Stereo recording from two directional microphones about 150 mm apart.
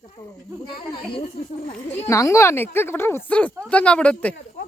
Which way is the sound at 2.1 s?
20° left (ahead or behind).